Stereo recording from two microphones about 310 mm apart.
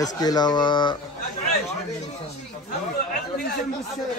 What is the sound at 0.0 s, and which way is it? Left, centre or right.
Speech, centre.